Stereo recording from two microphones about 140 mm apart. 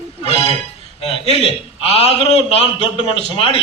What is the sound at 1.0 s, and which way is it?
A man's voice, 45° left (ahead or behind).